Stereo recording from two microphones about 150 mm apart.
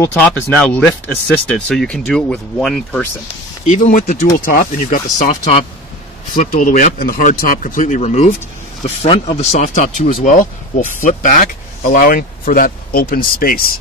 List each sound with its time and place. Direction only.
0.0 s speech: 10° left (ahead or behind)
3.6 s speech: 55° left (ahead or behind)
4.4 s speech: 75° left (ahead or behind)
5.3 s speech: 45° left (ahead or behind)
6.5 s speech: 65° left (ahead or behind)